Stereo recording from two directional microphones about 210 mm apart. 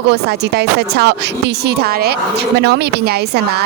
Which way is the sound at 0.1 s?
50° right (ahead or behind).